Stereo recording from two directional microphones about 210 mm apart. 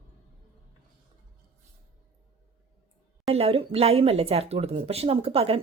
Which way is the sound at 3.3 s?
30° right (ahead or behind).